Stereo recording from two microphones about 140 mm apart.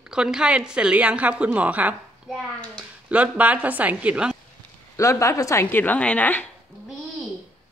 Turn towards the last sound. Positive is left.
turn(degrees=10)  # may be behind; listen again after turning